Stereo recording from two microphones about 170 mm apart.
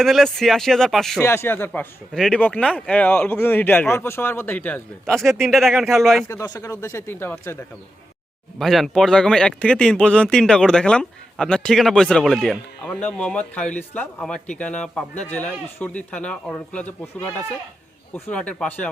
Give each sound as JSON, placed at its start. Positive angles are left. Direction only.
{"t": 0.0, "sound": "speech", "side_deg": 0}
{"t": 1.2, "sound": "speech", "side_deg": 15}
{"t": 6.2, "sound": "speech", "side_deg": 20}
{"t": 8.5, "sound": "speech", "side_deg": 0}